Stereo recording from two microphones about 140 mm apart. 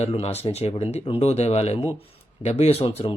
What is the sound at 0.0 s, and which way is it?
Speech, 45° left (ahead or behind).